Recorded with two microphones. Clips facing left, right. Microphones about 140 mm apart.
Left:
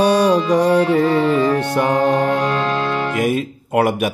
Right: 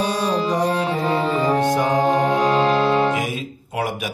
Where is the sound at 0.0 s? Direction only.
70° left (ahead or behind).